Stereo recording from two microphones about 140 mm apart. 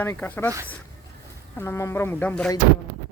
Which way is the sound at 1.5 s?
15° left (ahead or behind).